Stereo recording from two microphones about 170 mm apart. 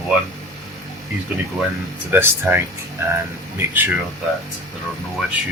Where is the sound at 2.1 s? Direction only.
15° right (ahead or behind).